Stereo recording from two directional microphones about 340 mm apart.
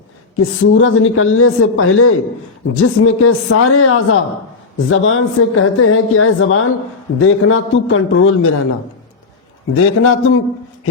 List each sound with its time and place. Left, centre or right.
0.3 s a woman's voice: left
9.7 s a woman's voice: left